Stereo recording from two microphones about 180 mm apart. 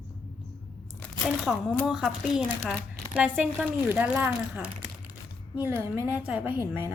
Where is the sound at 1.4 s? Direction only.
Centre (ahead or behind).